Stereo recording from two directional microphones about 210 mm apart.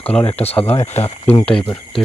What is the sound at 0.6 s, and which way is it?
Speech, 10° left (ahead or behind).